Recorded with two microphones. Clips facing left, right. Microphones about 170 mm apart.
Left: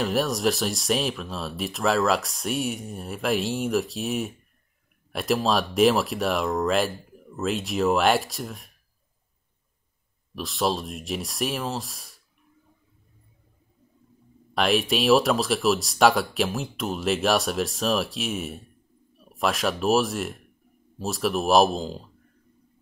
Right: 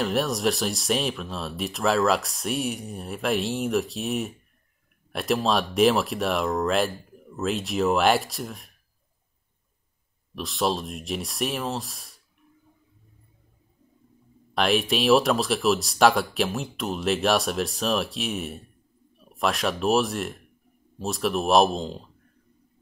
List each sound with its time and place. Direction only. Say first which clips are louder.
0.0 s speech: left 1 dB; centre (ahead or behind)
10.3 s speech: even; centre (ahead or behind)
14.5 s speech: even; centre (ahead or behind)